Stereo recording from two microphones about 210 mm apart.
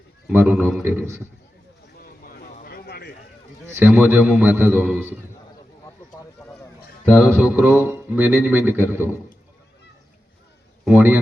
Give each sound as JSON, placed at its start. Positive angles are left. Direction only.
{"t": 0.3, "sound": "a man's voice", "side_deg": -5}
{"t": 2.0, "sound": "a sound", "side_deg": 45}
{"t": 3.7, "sound": "a man's voice", "side_deg": -10}
{"t": 6.4, "sound": "a sound", "side_deg": 15}
{"t": 7.2, "sound": "a man's voice", "side_deg": -5}
{"t": 10.8, "sound": "a man's voice", "side_deg": -5}